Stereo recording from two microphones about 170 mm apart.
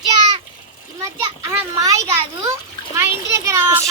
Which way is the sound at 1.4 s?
20° right (ahead or behind).